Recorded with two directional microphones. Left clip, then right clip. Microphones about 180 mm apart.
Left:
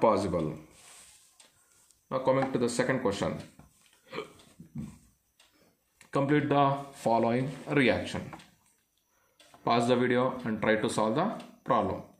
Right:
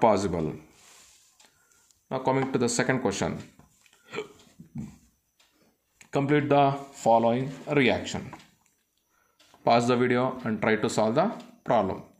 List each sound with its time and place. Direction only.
0.0 s speech: 45° right (ahead or behind)
2.0 s speech: 45° right (ahead or behind)
4.0 s hiccup: 40° right (ahead or behind)
5.9 s speech: 35° right (ahead or behind)
7.0 s speech: 20° right (ahead or behind)
9.7 s speech: 35° right (ahead or behind)